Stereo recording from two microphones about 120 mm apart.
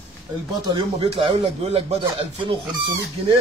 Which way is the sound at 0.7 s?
55° right (ahead or behind).